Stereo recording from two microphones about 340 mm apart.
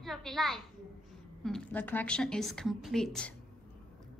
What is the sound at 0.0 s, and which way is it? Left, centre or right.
A child's voice, centre.